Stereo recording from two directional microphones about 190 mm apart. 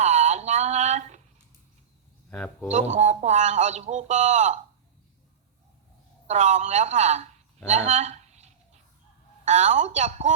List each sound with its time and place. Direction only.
0.0 s a sound: 35° right (ahead or behind)
2.3 s speech: 5° left (ahead or behind)
2.6 s a man's voice: 35° right (ahead or behind)
6.2 s a man's voice: 40° right (ahead or behind)
7.9 s a sound: 35° right (ahead or behind)
9.4 s a man's voice: 40° right (ahead or behind)